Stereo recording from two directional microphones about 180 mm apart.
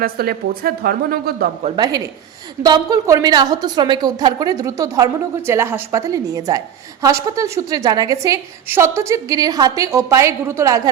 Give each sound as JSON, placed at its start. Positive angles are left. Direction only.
{"t": 0.0, "sound": "speech", "side_deg": -55}
{"t": 1.7, "sound": "a woman's voice", "side_deg": -20}